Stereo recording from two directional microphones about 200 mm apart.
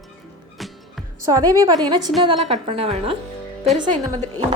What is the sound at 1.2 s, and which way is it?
A woman's voice, 15° right (ahead or behind).